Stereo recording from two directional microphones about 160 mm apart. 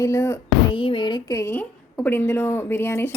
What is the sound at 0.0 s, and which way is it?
Speech, 20° left (ahead or behind).